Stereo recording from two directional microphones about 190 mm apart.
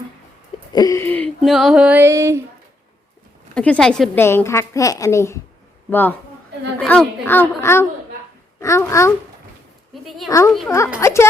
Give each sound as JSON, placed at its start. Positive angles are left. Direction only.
{"t": 0.7, "sound": "wheeze", "side_deg": 20}
{"t": 1.4, "sound": "music", "side_deg": 0}
{"t": 3.5, "sound": "a woman's voice", "side_deg": 5}
{"t": 9.9, "sound": "a woman's voice", "side_deg": 0}
{"t": 10.2, "sound": "a woman's voice", "side_deg": 15}